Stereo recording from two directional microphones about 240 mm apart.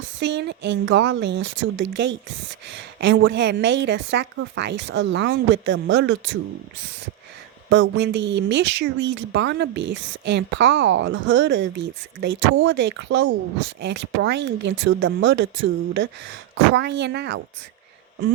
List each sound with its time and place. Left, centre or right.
0.2 s speech: right
7.7 s speech: right